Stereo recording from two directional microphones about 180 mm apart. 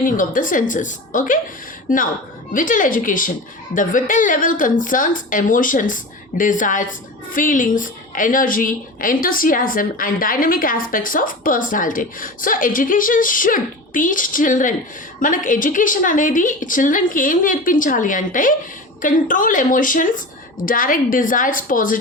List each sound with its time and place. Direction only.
0.0 s a woman's voice: 50° left (ahead or behind)